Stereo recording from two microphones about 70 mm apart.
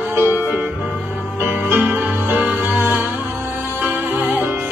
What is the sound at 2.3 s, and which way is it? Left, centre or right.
Music, centre.